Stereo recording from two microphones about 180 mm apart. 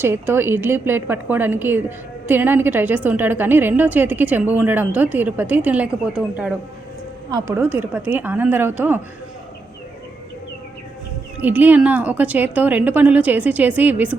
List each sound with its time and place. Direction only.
0.0 s a woman's voice: 10° right (ahead or behind)
7.3 s a woman's voice: 20° right (ahead or behind)
7.5 s a woman's voice: 10° right (ahead or behind)
11.3 s a woman's voice: 10° right (ahead or behind)